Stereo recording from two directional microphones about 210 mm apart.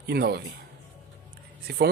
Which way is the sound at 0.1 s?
50° right (ahead or behind).